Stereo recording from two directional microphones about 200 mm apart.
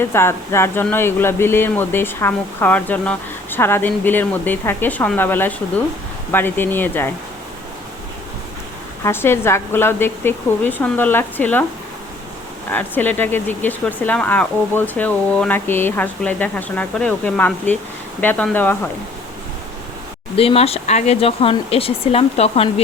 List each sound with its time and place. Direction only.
0.0 s speech: 10° left (ahead or behind)
9.0 s speech: 10° left (ahead or behind)
12.7 s speech: 10° left (ahead or behind)
20.3 s speech: 30° left (ahead or behind)